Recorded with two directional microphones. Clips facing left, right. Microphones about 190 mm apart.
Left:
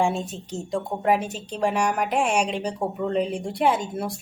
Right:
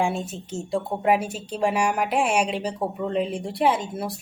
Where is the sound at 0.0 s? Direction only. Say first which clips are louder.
Left 1 dB; centre (ahead or behind).